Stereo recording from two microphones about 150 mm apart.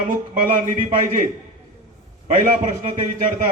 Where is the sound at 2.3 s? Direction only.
60° right (ahead or behind).